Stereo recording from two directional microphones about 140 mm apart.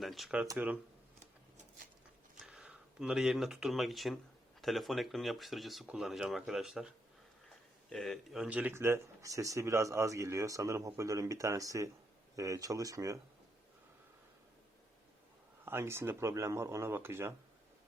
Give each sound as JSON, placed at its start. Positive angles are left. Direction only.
{"t": 0.0, "sound": "speech", "side_deg": 0}
{"t": 2.5, "sound": "speech", "side_deg": -5}
{"t": 15.6, "sound": "speech", "side_deg": -15}